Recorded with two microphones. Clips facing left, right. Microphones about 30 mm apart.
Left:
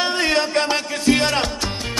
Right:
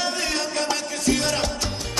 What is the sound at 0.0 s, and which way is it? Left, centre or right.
Music, left.